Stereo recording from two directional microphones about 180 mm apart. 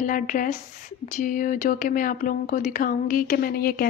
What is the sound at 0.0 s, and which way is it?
Speech, 50° left (ahead or behind).